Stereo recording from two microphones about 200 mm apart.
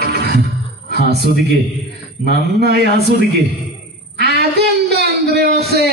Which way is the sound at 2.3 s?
55° right (ahead or behind).